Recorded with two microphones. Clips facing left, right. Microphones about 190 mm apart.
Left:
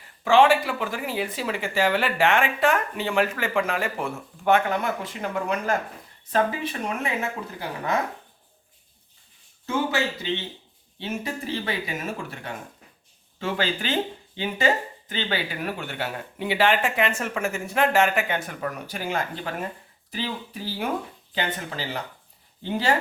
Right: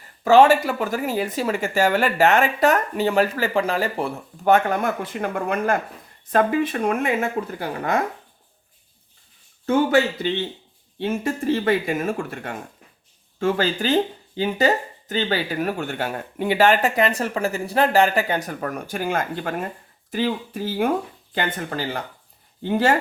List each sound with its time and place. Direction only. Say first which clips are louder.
0.3 s speech: right 4 dB; 40° right (ahead or behind)
11.0 s speech: right 8 dB; 50° right (ahead or behind)
13.4 s speech: right 6 dB; 40° right (ahead or behind)